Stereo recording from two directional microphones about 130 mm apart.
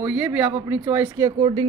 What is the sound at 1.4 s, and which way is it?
Speech, 40° right (ahead or behind).